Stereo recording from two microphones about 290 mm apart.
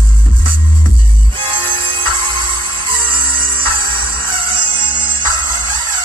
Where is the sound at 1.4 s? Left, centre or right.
Centre.